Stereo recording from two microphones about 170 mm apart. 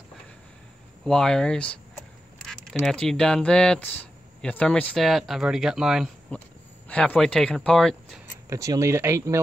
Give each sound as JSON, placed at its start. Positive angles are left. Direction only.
{"t": 1.0, "sound": "speech", "side_deg": 5}
{"t": 8.5, "sound": "speech", "side_deg": -20}